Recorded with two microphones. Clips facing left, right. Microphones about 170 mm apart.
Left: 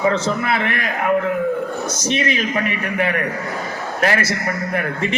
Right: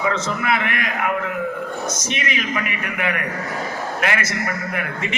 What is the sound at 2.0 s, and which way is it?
A man's voice, 30° left (ahead or behind).